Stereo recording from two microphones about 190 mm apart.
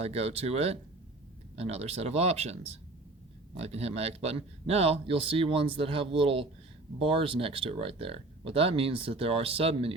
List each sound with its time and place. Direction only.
0.0 s speech: 35° right (ahead or behind)